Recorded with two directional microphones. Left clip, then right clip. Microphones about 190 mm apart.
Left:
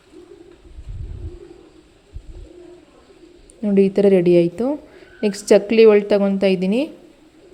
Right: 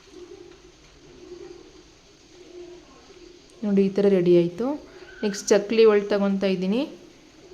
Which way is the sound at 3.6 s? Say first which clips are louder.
Left 6 dB; 20° left (ahead or behind).